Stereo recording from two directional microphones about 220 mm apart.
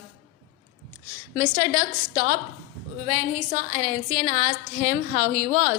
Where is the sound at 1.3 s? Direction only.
35° right (ahead or behind).